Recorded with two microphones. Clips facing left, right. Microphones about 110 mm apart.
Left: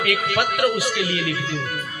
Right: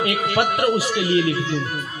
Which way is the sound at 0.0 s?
25° right (ahead or behind).